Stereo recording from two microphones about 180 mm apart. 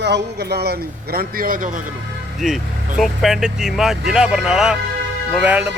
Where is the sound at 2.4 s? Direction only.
Centre (ahead or behind).